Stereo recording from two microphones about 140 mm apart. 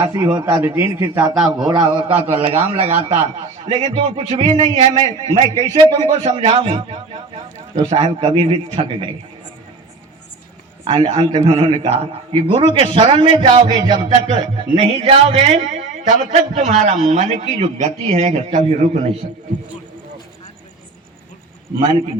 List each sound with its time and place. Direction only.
0.1 s a man's voice: 20° right (ahead or behind)
1.4 s a man's voice: 5° right (ahead or behind)
1.6 s a man's voice: 30° right (ahead or behind)
10.8 s a man's voice: 40° right (ahead or behind); by 18.9 s 55° right (ahead or behind)